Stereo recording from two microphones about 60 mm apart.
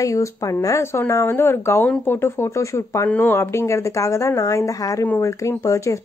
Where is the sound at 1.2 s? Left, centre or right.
Left.